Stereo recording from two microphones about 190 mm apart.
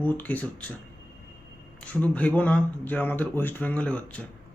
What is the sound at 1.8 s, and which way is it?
Speech, 5° left (ahead or behind).